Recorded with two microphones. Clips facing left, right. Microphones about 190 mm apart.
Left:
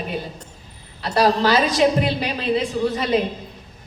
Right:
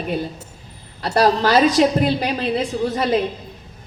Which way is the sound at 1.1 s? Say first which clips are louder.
Right 2 dB; 45° right (ahead or behind).